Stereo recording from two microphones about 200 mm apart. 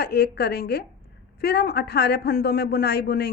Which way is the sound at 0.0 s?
50° left (ahead or behind).